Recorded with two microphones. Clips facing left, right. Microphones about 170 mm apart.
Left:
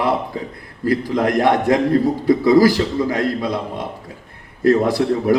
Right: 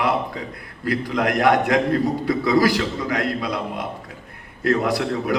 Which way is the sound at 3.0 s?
30° left (ahead or behind).